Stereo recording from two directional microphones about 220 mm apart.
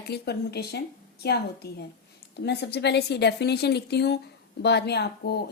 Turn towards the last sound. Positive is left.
turn(degrees=45)  # may be behind; listen again after turning